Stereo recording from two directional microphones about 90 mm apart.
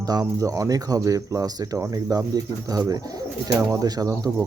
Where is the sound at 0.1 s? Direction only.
40° right (ahead or behind).